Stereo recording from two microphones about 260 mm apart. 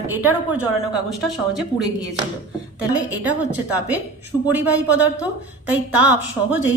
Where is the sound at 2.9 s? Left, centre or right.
Centre.